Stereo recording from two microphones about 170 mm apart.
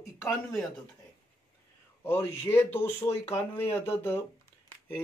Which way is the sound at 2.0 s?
15° left (ahead or behind).